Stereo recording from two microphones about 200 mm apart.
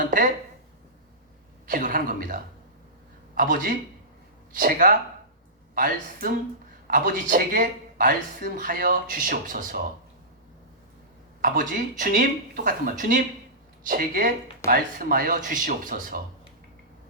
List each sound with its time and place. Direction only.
0.0 s speech: 40° right (ahead or behind)
1.6 s speech: 40° right (ahead or behind)
11.3 s speech: 40° right (ahead or behind)